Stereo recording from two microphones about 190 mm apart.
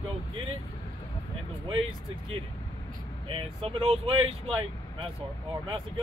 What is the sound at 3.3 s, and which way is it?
Speech, 30° right (ahead or behind).